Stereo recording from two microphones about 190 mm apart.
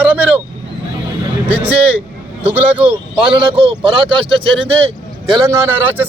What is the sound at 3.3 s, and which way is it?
Speech, 25° right (ahead or behind).